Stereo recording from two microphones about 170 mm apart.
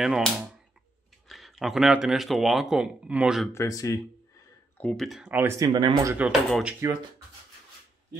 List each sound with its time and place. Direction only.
0.0 s speech: centre (ahead or behind)
1.3 s speech: centre (ahead or behind)
3.5 s speech: 20° left (ahead or behind)
4.7 s speech: 5° left (ahead or behind); by 5.7 s 10° right (ahead or behind)
5.7 s speech: 25° right (ahead or behind)
6.1 s speech: 5° right (ahead or behind)